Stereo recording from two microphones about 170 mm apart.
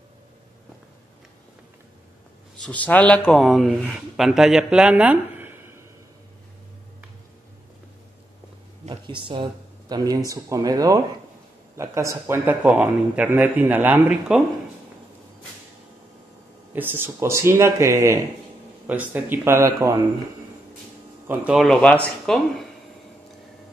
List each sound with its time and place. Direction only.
2.6 s speech: 10° left (ahead or behind); by 5.6 s 10° right (ahead or behind)
8.8 s a man's voice: 30° right (ahead or behind); by 14.4 s 5° right (ahead or behind)
16.7 s a man's voice: 10° right (ahead or behind)
21.3 s a man's voice: 5° right (ahead or behind)
21.6 s speech: 5° left (ahead or behind)